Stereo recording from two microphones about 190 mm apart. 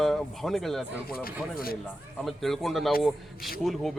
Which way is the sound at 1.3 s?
50° left (ahead or behind).